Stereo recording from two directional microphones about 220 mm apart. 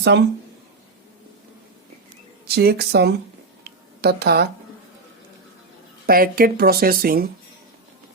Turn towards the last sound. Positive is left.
turn(degrees=-45)  # may be behind; listen again after turning